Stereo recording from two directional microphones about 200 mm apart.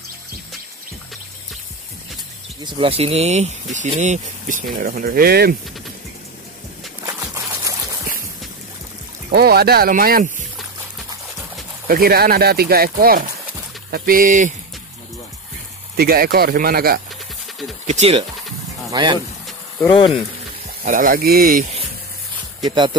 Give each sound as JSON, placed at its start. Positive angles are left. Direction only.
{"t": 2.6, "sound": "speech", "side_deg": -25}
{"t": 7.1, "sound": "a sound", "side_deg": -15}
{"t": 9.3, "sound": "speech", "side_deg": -50}
{"t": 11.9, "sound": "speech", "side_deg": -50}
{"t": 16.0, "sound": "speech", "side_deg": -50}
{"t": 17.8, "sound": "speech", "side_deg": -35}
{"t": 18.9, "sound": "speech", "side_deg": -20}
{"t": 20.8, "sound": "speech", "side_deg": -45}
{"t": 22.7, "sound": "speech", "side_deg": -25}